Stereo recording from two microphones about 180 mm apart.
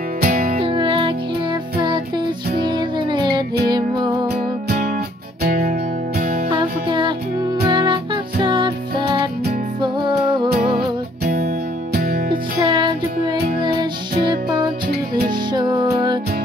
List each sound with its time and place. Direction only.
0.2 s music: 50° right (ahead or behind)
0.6 s music: 30° right (ahead or behind)
5.4 s music: 55° right (ahead or behind)
6.5 s music: 25° right (ahead or behind)
11.2 s music: 55° right (ahead or behind)
12.3 s music: 25° right (ahead or behind)